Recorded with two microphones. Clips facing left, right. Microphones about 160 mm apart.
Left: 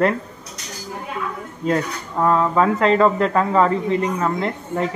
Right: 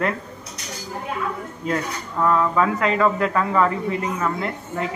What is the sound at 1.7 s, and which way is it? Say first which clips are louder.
Speech: left 4 dB; 25° left (ahead or behind).